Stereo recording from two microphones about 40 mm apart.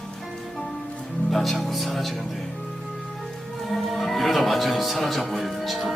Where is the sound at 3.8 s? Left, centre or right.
Centre.